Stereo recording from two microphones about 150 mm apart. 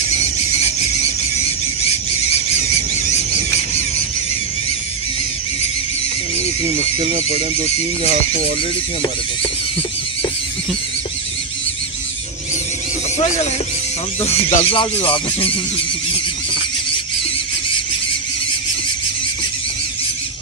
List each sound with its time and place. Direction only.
7.2 s speech: 50° right (ahead or behind)
13.2 s speech: 45° left (ahead or behind)